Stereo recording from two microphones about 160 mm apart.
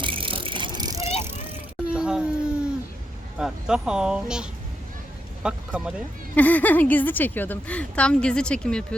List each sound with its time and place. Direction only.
0.0 s bicycle: 35° right (ahead or behind)
1.9 s a sound: 5° right (ahead or behind)
3.3 s speech: 5° right (ahead or behind)
6.3 s a woman's voice: 10° left (ahead or behind)